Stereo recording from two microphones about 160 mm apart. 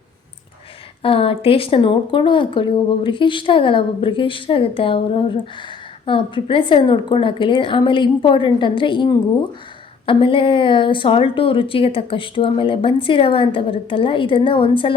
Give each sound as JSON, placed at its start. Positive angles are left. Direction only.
{"t": 1.0, "sound": "speech", "side_deg": 35}